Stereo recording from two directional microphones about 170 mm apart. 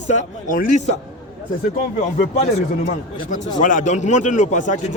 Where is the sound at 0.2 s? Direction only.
50° left (ahead or behind).